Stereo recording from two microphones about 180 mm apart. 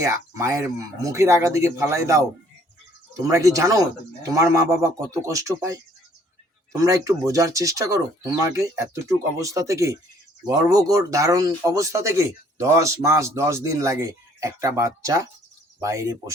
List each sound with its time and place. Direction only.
0.0 s speech: 15° right (ahead or behind)
3.2 s speech: 15° right (ahead or behind)